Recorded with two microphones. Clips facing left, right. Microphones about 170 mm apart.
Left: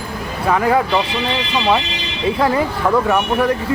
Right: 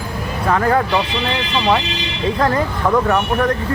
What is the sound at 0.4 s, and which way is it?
Speech, 10° left (ahead or behind).